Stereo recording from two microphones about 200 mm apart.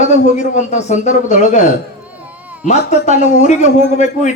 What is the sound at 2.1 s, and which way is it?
Cat, 5° right (ahead or behind).